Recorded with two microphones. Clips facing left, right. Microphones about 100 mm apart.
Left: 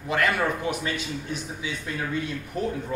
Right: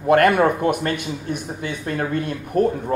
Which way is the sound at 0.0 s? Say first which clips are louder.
Right 10 dB; 55° right (ahead or behind).